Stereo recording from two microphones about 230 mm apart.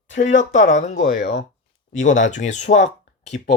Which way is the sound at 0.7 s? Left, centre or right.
Left.